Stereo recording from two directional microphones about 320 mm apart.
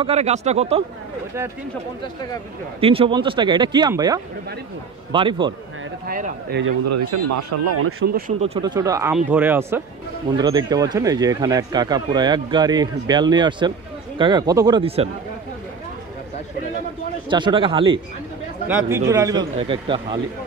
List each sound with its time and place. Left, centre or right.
0.0 s speech: centre
2.8 s speech: centre
6.0 s speech: right
6.9 s speech: right
8.1 s speech: centre
17.3 s speech: centre